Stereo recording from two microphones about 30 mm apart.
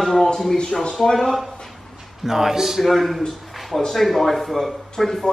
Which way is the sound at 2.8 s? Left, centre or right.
Centre.